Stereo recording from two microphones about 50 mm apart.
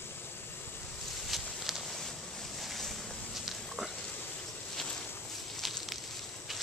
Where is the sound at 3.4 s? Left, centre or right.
Centre.